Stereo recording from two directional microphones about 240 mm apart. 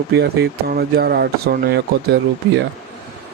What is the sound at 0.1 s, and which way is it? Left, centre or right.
Speech, right.